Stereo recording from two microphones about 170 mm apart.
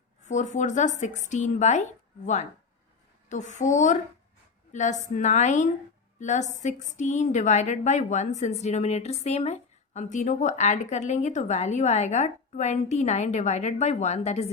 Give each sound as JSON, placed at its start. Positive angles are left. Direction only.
{"t": 0.3, "sound": "a woman's voice", "side_deg": 45}